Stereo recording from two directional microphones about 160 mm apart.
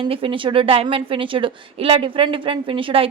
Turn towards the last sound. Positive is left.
turn(degrees=-35)  # may be behind; listen again after turning